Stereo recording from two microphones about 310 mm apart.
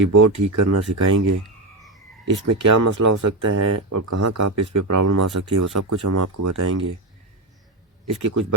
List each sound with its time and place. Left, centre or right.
0.1 s speech: right
2.3 s speech: right
8.2 s speech: right